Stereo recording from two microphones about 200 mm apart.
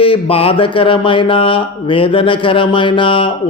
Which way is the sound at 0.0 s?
30° left (ahead or behind).